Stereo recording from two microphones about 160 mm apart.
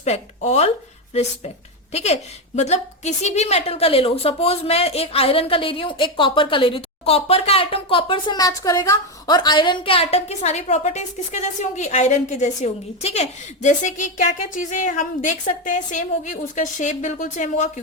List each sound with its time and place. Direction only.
0.0 s speech: 45° left (ahead or behind)
1.9 s a woman's voice: 45° left (ahead or behind)